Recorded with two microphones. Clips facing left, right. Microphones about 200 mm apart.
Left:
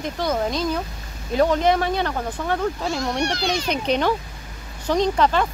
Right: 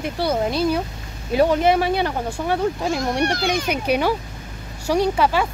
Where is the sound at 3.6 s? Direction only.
10° right (ahead or behind).